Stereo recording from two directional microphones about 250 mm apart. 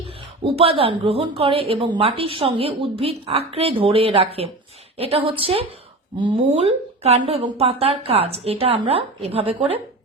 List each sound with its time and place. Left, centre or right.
0.5 s a woman's voice: right